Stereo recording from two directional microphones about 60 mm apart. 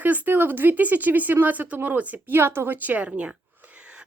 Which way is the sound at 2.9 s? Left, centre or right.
Right.